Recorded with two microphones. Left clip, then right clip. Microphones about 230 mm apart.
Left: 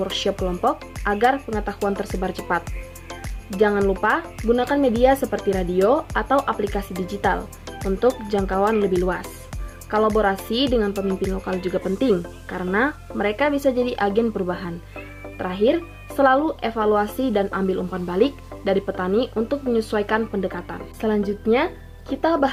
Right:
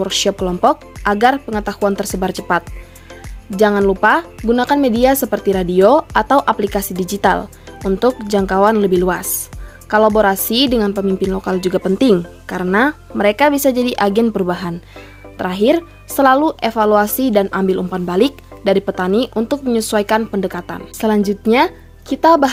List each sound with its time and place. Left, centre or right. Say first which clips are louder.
0.0 s speech: right 6 dB; right
10.2 s speech: right 7 dB; right